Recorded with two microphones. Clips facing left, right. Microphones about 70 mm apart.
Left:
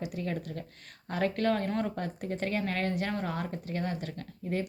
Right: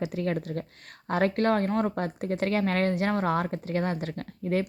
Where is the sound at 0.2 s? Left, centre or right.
Right.